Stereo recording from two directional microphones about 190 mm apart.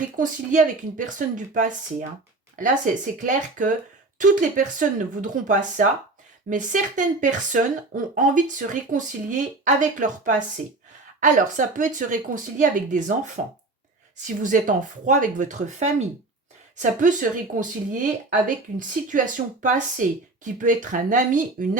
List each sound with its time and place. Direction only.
0.0 s a woman's voice: 40° right (ahead or behind)